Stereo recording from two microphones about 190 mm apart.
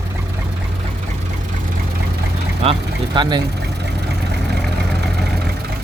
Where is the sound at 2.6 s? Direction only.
25° right (ahead or behind).